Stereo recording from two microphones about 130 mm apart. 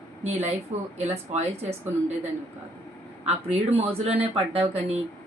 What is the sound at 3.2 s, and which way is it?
Speech, 55° right (ahead or behind).